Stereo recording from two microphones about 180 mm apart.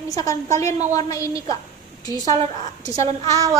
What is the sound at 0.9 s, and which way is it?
Speech, 20° left (ahead or behind).